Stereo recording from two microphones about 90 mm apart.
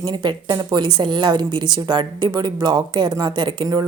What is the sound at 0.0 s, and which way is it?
A woman's voice, 55° right (ahead or behind).